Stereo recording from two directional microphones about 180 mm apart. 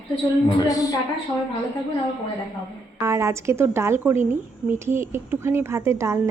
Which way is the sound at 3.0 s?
15° right (ahead or behind).